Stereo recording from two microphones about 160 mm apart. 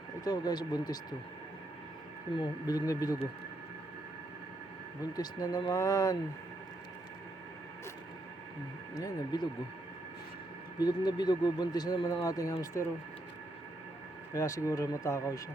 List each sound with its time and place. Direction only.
0.3 s speech: 25° left (ahead or behind)
2.3 s speech: 25° left (ahead or behind)
5.1 s speech: 25° left (ahead or behind)
9.0 s speech: 25° left (ahead or behind)
10.8 s speech: 25° left (ahead or behind)
14.3 s speech: 20° left (ahead or behind)